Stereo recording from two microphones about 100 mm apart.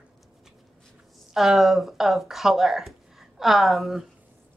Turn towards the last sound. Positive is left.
turn(degrees=0)  # may be behind; listen again after turning